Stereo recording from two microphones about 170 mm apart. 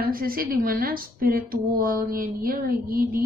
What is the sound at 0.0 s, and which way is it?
Speech, 60° right (ahead or behind).